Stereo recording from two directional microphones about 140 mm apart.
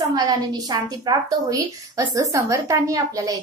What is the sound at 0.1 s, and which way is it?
A woman's voice, 25° right (ahead or behind).